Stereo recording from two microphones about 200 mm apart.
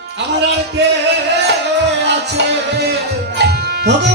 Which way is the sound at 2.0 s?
60° right (ahead or behind).